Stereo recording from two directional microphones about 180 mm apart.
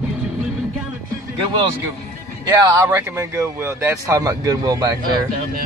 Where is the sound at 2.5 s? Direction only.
20° right (ahead or behind).